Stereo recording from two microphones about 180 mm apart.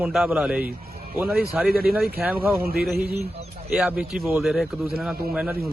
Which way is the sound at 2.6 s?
55° right (ahead or behind).